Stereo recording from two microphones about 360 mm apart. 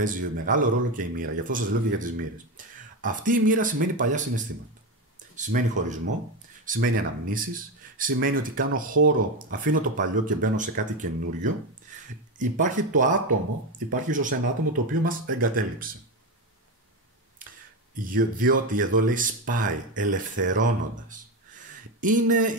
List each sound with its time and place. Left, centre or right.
0.0 s speech: right
5.3 s speech: right
17.9 s speech: right